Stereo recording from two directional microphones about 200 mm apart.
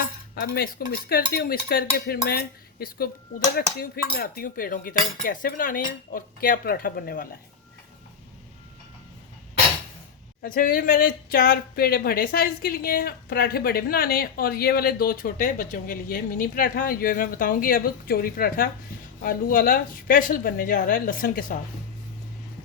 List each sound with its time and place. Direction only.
0.3 s speech: 50° left (ahead or behind)
10.4 s speech: 45° left (ahead or behind)